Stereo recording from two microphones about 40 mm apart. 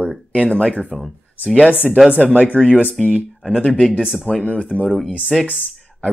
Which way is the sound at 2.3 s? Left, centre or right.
Left.